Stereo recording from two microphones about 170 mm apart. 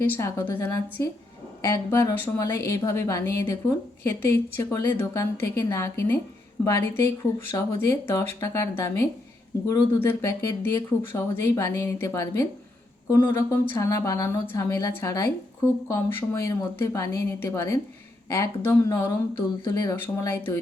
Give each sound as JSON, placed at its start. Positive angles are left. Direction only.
{"t": 0.0, "sound": "speech", "side_deg": 15}